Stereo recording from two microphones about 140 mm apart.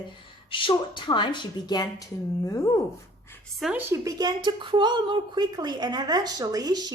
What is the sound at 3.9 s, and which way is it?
Speech, 25° right (ahead or behind).